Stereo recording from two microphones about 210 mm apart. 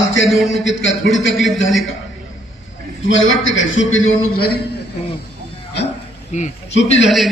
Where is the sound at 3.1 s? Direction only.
65° left (ahead or behind).